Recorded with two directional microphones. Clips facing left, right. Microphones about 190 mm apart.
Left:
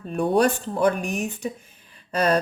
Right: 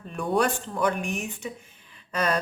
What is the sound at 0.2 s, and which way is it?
A woman's voice, 35° left (ahead or behind).